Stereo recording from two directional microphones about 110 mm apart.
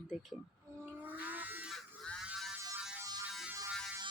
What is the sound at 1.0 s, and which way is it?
Electric shaver, 15° right (ahead or behind).